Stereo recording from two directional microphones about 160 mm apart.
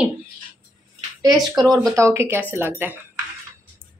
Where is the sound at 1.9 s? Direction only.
15° right (ahead or behind).